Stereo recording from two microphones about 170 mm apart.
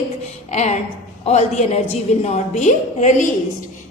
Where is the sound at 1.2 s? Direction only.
40° left (ahead or behind).